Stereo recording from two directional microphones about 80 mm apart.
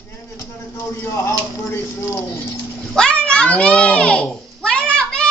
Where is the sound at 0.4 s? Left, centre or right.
Left.